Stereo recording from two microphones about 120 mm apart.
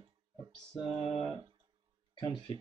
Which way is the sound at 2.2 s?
40° left (ahead or behind).